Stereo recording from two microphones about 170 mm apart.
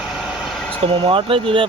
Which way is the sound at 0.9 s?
35° right (ahead or behind).